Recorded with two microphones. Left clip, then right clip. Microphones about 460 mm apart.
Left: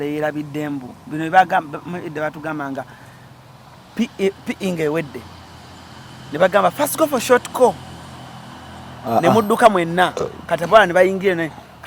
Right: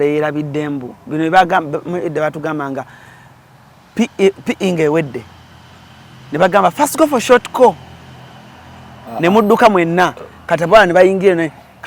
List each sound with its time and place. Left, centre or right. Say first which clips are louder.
0.0 s a man's voice: right 7 dB; right
3.9 s a man's voice: right 7 dB; right
6.3 s a man's voice: right 4 dB; right
9.2 s a man's voice: right 4 dB; right